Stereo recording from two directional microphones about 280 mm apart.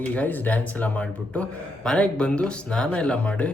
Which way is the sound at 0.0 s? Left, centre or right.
Centre.